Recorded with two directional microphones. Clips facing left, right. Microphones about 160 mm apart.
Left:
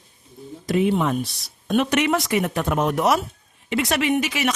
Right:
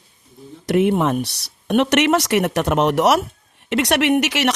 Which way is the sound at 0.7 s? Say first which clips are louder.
Right 3 dB; 65° right (ahead or behind).